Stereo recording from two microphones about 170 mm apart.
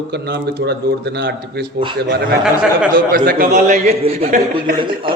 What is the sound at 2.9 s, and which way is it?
A man's voice, 55° right (ahead or behind).